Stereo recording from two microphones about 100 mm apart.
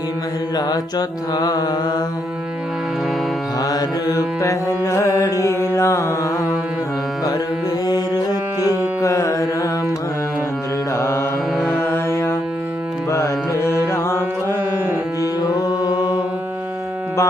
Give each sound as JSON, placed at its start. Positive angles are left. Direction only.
{"t": 0.5, "sound": "music", "side_deg": 40}
{"t": 3.6, "sound": "music", "side_deg": 40}
{"t": 7.9, "sound": "music", "side_deg": 45}
{"t": 8.6, "sound": "music", "side_deg": -25}
{"t": 9.0, "sound": "carnatic music", "side_deg": 35}
{"t": 10.9, "sound": "mantra", "side_deg": 30}
{"t": 11.5, "sound": "music", "side_deg": -5}
{"t": 11.8, "sound": "music", "side_deg": 25}
{"t": 15.2, "sound": "music", "side_deg": 40}